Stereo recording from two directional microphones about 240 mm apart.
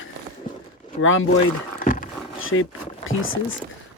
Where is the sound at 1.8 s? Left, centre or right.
Left.